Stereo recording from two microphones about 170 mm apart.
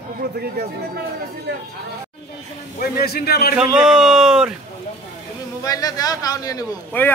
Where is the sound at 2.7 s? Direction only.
65° left (ahead or behind).